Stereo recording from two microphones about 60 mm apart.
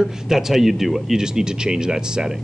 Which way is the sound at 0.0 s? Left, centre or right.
Centre.